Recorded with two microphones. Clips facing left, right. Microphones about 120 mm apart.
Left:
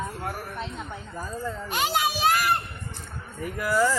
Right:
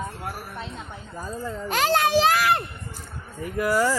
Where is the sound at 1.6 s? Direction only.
90° right.